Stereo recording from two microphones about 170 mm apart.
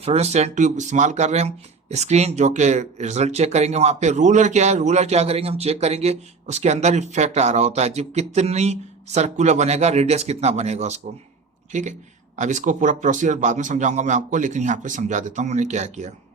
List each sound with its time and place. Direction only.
0.0 s a man's voice: 40° right (ahead or behind)